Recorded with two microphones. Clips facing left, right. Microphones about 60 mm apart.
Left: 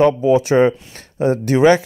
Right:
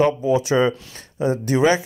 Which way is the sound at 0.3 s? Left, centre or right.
Left.